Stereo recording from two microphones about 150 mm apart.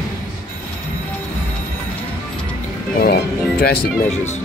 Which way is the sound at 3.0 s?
90° left.